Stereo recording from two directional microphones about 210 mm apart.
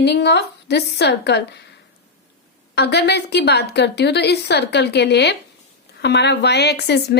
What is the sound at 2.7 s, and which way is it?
Speech, 50° left (ahead or behind).